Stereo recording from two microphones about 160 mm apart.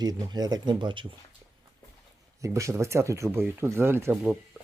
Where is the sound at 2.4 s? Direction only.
20° right (ahead or behind).